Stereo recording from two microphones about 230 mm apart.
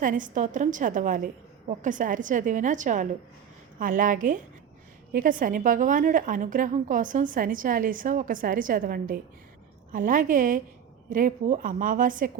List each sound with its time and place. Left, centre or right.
0.0 s a woman's voice: right